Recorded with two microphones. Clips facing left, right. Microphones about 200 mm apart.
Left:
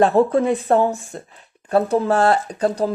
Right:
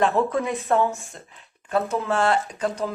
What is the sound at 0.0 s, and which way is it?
Speech, 35° left (ahead or behind).